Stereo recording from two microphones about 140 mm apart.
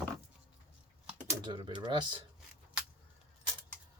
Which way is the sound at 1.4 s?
35° right (ahead or behind).